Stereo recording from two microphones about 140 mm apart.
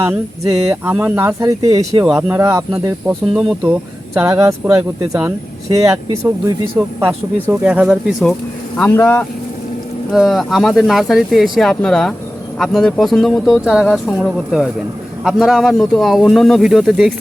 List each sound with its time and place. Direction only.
0.0 s speech: 20° right (ahead or behind)
3.1 s speech: 5° right (ahead or behind)
4.1 s speech: 20° right (ahead or behind)
7.4 s speech: 10° right (ahead or behind)
8.8 s speech: 15° left (ahead or behind)
10.1 s speech: centre (ahead or behind)